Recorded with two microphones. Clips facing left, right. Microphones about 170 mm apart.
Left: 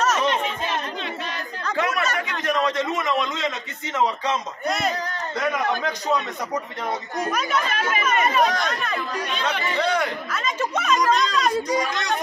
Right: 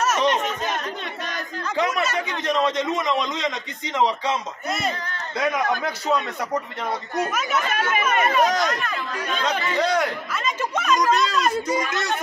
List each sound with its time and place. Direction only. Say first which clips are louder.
0.0 s chatter: right 1 dB; 10° right (ahead or behind)
1.7 s chatter: right 1 dB; 10° right (ahead or behind)
2.1 s a man's voice: right 1 dB; 20° right (ahead or behind)
4.6 s a man's voice: left 3 dB; centre (ahead or behind)
7.3 s speech: even; 5° right (ahead or behind)
9.8 s speech: right 1 dB; 10° right (ahead or behind)
11.9 s a sound: even; 5° right (ahead or behind)